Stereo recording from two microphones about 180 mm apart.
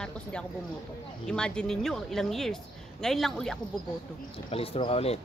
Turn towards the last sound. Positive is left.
turn(degrees=35)  # may be behind; listen again after turning